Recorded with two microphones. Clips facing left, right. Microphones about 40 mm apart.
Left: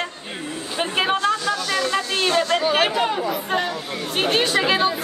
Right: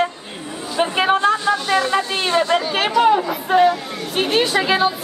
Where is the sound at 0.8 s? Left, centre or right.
Centre.